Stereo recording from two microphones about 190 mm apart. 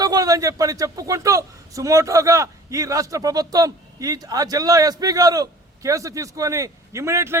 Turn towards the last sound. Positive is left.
turn(degrees=-15)  # may be behind; listen again after turning